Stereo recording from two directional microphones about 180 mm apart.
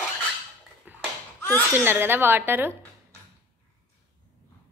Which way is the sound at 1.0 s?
10° left (ahead or behind).